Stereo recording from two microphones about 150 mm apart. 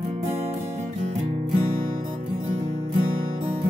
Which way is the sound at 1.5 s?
60° right (ahead or behind).